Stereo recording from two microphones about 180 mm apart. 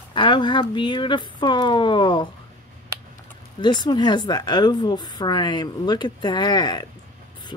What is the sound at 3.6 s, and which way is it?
A woman's voice, 25° left (ahead or behind).